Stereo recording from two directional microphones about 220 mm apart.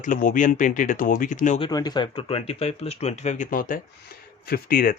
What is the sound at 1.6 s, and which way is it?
Speech, 20° left (ahead or behind).